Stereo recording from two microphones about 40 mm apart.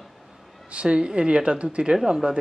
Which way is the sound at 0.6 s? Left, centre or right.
Right.